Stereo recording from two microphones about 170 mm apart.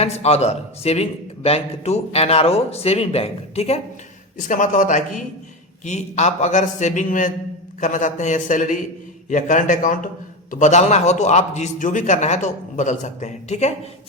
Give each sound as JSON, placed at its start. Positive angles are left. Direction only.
{"t": 0.0, "sound": "a man's voice", "side_deg": 40}
{"t": 4.4, "sound": "a man's voice", "side_deg": 50}